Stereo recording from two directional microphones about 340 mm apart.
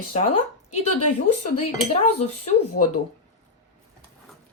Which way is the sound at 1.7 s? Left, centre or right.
Centre.